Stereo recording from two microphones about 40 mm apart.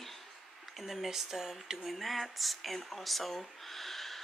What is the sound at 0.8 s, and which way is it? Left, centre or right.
Speech, centre.